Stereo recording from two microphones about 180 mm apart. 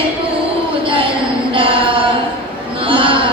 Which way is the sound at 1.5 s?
30° right (ahead or behind).